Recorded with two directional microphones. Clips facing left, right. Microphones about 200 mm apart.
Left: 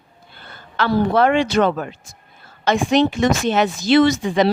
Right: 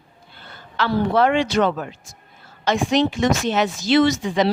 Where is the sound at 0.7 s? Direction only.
50° left (ahead or behind).